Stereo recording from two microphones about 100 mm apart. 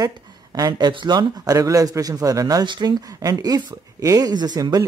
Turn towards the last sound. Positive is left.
turn(degrees=-40)  # may be behind; listen again after turning